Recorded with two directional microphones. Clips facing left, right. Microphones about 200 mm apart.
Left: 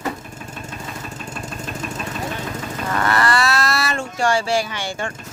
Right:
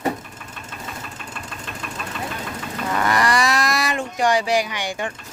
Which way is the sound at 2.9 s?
10° right (ahead or behind).